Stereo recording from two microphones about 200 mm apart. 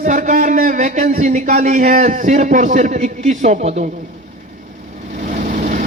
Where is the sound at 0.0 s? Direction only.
40° right (ahead or behind).